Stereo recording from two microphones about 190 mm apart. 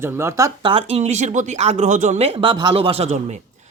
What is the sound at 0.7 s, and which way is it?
Speech, 30° right (ahead or behind).